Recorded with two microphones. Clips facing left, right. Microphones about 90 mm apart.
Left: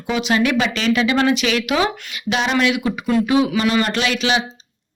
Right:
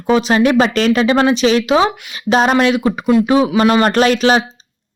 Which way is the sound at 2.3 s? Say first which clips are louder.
Right 6 dB; 40° right (ahead or behind).